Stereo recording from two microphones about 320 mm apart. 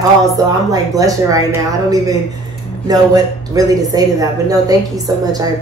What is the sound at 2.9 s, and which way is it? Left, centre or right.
Speech, centre.